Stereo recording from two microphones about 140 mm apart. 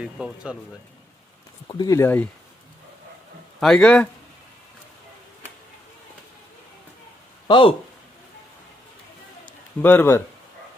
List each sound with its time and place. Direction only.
0.0 s speech: 5° right (ahead or behind)
1.6 s speech: 30° left (ahead or behind)
2.0 s speech: 15° left (ahead or behind)
3.6 s speech: 5° left (ahead or behind)
7.4 s speech: 35° left (ahead or behind)
9.8 s speech: 15° left (ahead or behind)